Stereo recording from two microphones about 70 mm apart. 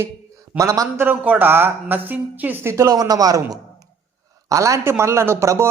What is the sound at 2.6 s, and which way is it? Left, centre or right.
Speech, right.